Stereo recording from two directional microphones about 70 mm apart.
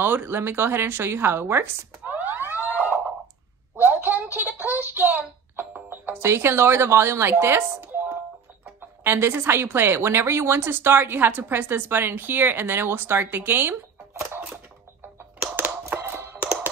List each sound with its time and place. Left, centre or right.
0.0 s speech: right
3.7 s a sound: right
6.1 s a woman's voice: right
15.9 s computer keyboard: right